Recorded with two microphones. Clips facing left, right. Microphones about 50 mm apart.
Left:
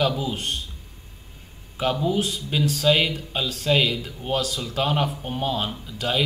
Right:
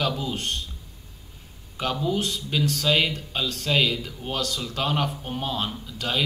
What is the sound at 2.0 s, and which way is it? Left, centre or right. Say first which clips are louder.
Speech: left 2 dB; centre.